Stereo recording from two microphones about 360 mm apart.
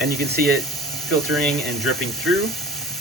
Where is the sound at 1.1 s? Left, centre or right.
Centre.